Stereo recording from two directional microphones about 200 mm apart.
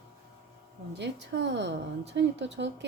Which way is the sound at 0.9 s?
60° right (ahead or behind).